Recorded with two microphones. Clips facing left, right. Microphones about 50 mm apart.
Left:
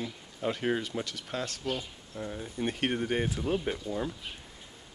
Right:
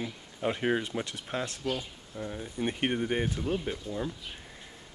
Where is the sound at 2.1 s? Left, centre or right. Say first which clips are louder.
Even; centre.